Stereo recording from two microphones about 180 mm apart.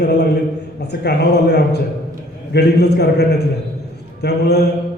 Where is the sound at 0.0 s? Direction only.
55° left (ahead or behind).